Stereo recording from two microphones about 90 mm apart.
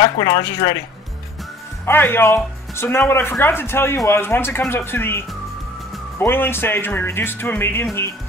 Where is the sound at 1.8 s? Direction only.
25° left (ahead or behind).